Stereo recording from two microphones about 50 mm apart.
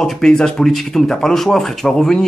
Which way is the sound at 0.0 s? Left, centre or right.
Centre.